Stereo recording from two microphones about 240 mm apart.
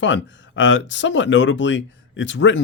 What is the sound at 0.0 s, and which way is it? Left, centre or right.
Speech, left.